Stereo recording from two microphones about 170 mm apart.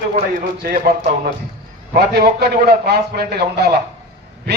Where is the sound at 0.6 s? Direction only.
60° right (ahead or behind).